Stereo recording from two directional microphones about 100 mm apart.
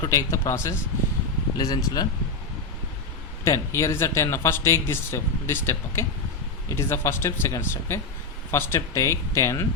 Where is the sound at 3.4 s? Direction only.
30° left (ahead or behind).